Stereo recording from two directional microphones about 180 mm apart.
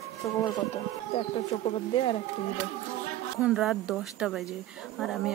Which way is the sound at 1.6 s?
35° left (ahead or behind).